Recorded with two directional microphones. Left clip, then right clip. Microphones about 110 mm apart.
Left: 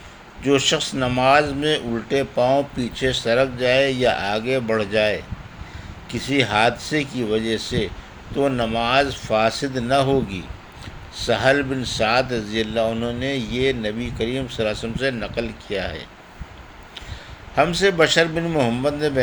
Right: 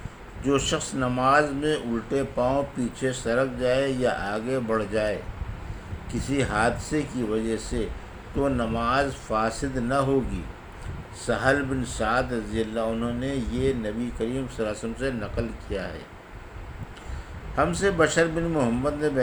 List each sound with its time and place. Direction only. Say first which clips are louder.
0.4 s speech: left 6 dB; 60° left (ahead or behind)
11.3 s speech: left 5 dB; 70° left (ahead or behind)
17.5 s speech: left 6 dB; 60° left (ahead or behind)